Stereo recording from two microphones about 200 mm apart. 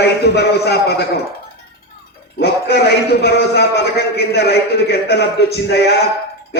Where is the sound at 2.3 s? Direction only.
55° left (ahead or behind).